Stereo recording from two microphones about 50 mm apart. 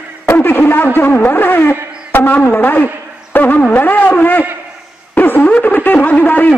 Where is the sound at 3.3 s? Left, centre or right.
Left.